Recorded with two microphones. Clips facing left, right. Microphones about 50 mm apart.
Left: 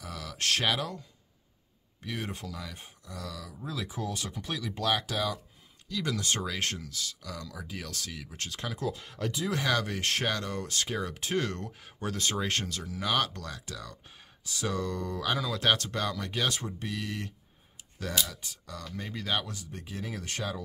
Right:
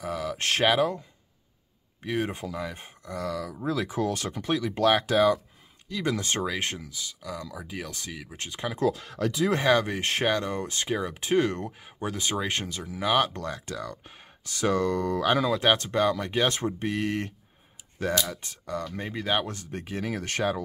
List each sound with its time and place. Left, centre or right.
0.0 s speech: right
5.9 s speech: right
8.8 s speech: right
9.5 s speech: right
13.3 s speech: right
15.2 s speech: right
15.5 s speech: right
18.4 s speech: right
18.9 s speech: right
19.4 s speech: right